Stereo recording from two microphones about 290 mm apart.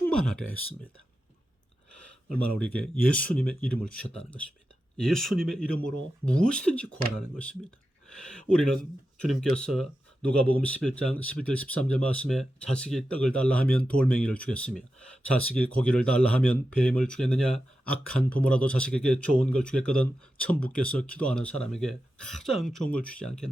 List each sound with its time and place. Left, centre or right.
0.0 s speech: centre
2.4 s speech: centre
4.9 s speech: centre
8.1 s speech: centre